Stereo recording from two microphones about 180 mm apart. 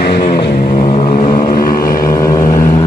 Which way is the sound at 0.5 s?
40° left (ahead or behind).